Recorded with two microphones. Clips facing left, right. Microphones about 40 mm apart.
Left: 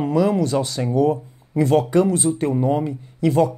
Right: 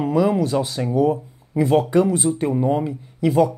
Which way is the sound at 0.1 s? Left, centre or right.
Centre.